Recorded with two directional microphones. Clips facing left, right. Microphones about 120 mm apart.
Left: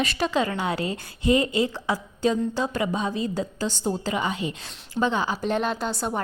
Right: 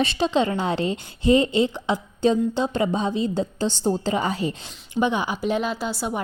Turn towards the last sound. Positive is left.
turn(degrees=-5)  # may be behind; listen again after turning